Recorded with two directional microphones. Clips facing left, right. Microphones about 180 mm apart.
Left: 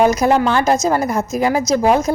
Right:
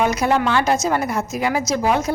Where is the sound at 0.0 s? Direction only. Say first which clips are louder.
Left 5 dB; 40° left (ahead or behind).